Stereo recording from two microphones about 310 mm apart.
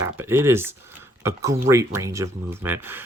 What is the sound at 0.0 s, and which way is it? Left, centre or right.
Speech, centre.